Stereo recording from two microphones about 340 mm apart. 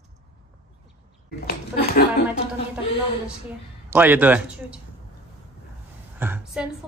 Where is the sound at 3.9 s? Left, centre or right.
Centre.